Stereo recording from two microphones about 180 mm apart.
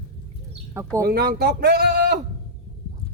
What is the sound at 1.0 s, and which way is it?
Speech, 55° right (ahead or behind).